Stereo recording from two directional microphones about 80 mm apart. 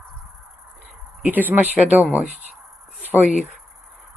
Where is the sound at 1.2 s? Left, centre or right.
Right.